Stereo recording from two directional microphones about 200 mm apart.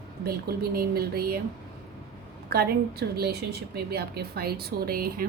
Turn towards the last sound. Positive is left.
turn(degrees=-45)  # may be behind; listen again after turning